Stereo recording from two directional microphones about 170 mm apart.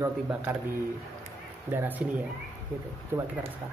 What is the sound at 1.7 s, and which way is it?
Speech, 10° right (ahead or behind).